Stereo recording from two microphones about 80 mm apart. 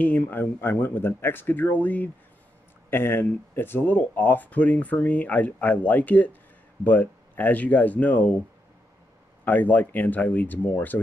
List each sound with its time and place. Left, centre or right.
0.0 s speech: left